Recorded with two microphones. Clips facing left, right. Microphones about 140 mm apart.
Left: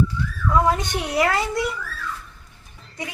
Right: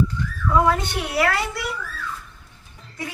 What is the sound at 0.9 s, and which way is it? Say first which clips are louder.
Speech: left 1 dB; 15° left (ahead or behind).